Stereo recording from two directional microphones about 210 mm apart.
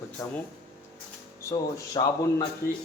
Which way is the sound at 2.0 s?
20° left (ahead or behind).